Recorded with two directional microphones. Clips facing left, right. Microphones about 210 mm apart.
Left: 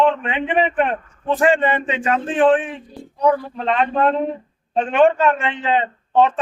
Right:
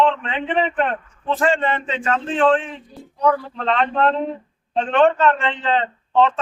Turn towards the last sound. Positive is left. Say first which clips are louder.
# left 1 dB
turn(degrees=15)  # may be behind; listen again after turning